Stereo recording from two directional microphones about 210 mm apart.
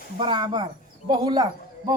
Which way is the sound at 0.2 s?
20° right (ahead or behind).